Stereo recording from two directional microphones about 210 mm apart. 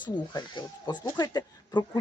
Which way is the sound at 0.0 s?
20° left (ahead or behind).